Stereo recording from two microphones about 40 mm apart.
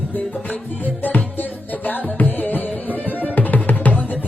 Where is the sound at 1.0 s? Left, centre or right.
Left.